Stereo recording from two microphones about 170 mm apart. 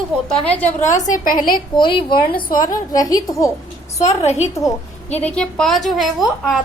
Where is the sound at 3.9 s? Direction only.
40° left (ahead or behind).